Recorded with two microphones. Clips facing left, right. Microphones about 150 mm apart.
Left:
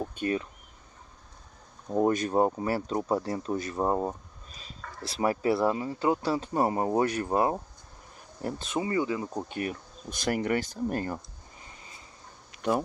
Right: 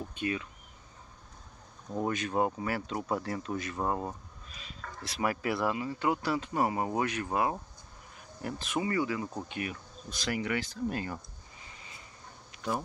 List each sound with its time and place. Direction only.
0.0 s speech: 40° left (ahead or behind)
1.9 s speech: 40° left (ahead or behind); by 9.3 s 25° left (ahead or behind)
9.3 s speech: 40° left (ahead or behind)